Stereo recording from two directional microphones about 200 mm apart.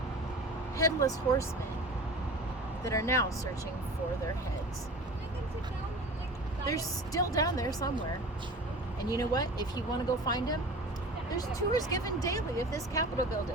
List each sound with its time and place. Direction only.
0.8 s speech: 15° left (ahead or behind)
2.8 s speech: 15° left (ahead or behind)
6.7 s speech: 15° left (ahead or behind)
9.0 s speech: 20° left (ahead or behind)